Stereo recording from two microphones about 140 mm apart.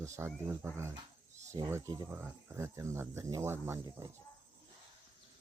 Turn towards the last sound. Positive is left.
turn(degrees=-20)  # may be behind; listen again after turning